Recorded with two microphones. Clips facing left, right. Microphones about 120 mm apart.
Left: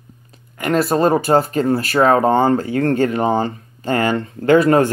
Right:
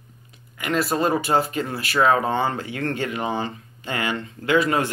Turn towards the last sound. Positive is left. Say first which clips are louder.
# left 8 dB
turn(degrees=45)  # may be behind; listen again after turning